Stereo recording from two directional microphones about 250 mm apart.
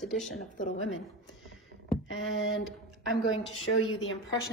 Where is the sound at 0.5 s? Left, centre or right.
Left.